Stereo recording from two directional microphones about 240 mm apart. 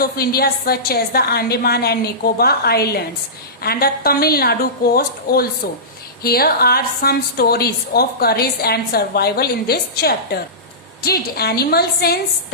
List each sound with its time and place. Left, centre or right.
0.0 s a woman's voice: left